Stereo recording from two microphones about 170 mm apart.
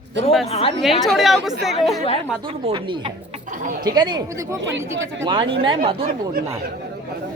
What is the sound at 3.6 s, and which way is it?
Speech, 50° right (ahead or behind).